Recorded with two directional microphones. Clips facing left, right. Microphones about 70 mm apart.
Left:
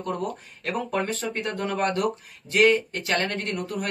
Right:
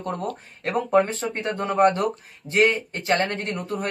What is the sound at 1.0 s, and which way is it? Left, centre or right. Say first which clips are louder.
Speech: right 1 dB; right.